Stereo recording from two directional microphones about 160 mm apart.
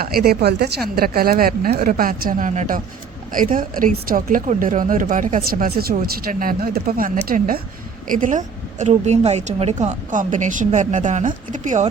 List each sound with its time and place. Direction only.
0.0 s a woman's voice: 70° right (ahead or behind); by 0.7 s 85° right
0.9 s a woman's voice: 70° right (ahead or behind); by 11.9 s 50° right (ahead or behind)